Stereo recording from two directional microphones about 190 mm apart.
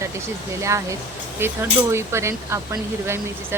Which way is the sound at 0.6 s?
15° right (ahead or behind).